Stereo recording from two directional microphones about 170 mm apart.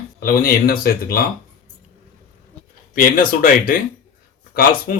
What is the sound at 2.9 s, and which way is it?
Speech, 55° left (ahead or behind).